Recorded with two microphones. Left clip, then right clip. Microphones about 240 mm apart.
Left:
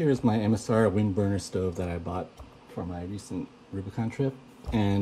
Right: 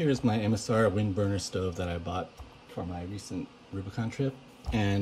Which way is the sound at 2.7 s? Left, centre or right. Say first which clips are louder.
Left 1 dB; right.